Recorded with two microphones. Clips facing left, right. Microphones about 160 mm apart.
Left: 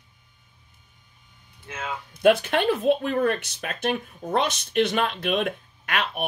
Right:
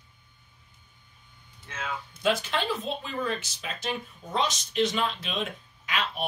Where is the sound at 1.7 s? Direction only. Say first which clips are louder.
Left 2 dB; 60° left (ahead or behind).